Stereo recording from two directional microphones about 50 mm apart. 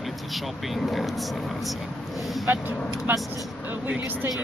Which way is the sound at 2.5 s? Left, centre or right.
Right.